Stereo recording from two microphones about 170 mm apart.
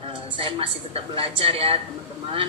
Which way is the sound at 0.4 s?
35° right (ahead or behind).